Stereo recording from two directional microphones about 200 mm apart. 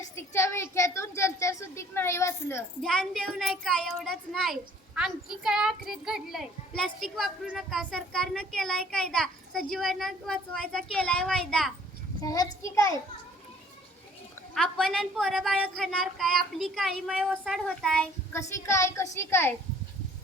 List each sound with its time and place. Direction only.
0.2 s a woman's voice: 15° left (ahead or behind)
2.8 s a child's voice: centre (ahead or behind)
12.2 s a woman's voice: 15° left (ahead or behind)
14.5 s a child's voice: centre (ahead or behind)